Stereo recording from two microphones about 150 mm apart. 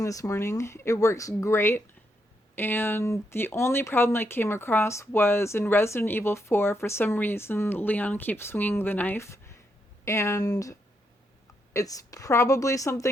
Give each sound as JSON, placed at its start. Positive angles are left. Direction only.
{"t": 0.0, "sound": "speech", "side_deg": 20}